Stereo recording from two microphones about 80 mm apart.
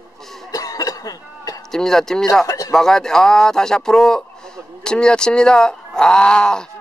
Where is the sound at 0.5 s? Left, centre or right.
Left.